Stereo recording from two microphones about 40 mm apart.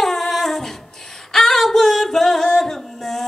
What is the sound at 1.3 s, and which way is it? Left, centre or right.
Singing, centre.